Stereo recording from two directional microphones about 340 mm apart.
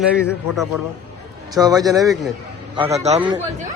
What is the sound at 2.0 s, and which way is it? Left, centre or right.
Speech, centre.